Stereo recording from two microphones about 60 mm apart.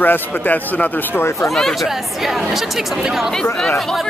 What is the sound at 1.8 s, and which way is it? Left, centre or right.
Speech, centre.